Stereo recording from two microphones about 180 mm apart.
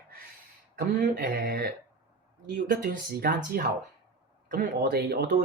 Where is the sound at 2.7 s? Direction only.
50° right (ahead or behind).